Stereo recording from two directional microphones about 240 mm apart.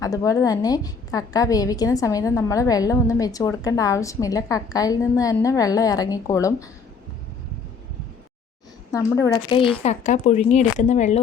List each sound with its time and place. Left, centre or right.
0.0 s a woman's voice: centre
8.9 s speech: centre; by 11.2 s left